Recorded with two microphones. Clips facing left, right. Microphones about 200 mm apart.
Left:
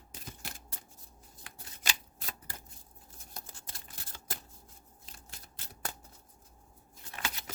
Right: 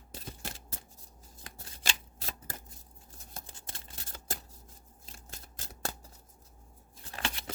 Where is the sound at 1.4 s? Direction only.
40° right (ahead or behind).